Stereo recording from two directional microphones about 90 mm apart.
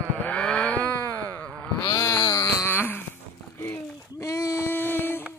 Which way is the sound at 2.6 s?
25° left (ahead or behind).